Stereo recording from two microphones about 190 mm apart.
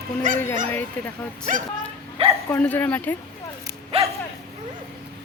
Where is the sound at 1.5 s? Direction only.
40° right (ahead or behind).